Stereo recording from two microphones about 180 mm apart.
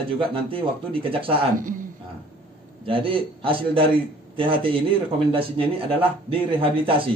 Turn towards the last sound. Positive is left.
turn(degrees=-30)  # may be behind; listen again after turning